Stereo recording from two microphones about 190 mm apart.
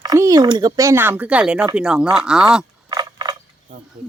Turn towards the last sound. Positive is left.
turn(degrees=-20)  # may be behind; listen again after turning